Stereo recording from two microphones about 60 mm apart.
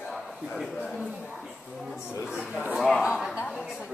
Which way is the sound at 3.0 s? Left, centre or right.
Centre.